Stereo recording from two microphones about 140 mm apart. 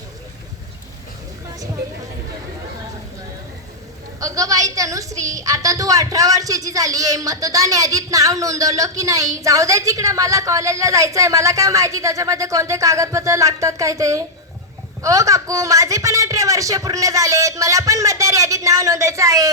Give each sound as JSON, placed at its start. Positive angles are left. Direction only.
{"t": 4.2, "sound": "a woman's voice", "side_deg": -25}